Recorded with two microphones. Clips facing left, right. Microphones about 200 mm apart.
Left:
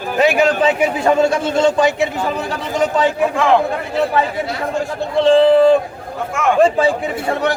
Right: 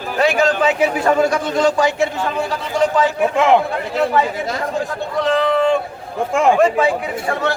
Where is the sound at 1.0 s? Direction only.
25° left (ahead or behind).